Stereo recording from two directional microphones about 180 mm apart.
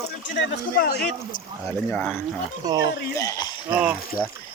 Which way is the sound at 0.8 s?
65° left (ahead or behind).